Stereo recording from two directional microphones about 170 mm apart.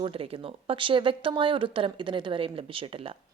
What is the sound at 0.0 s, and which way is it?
A woman's voice, 35° right (ahead or behind).